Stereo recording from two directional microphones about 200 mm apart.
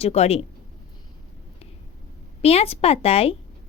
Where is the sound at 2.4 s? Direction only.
30° left (ahead or behind).